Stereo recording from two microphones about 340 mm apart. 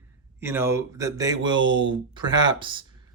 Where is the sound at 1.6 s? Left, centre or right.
Right.